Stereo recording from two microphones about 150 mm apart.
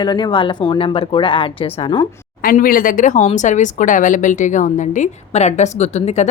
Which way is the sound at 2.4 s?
70° left (ahead or behind).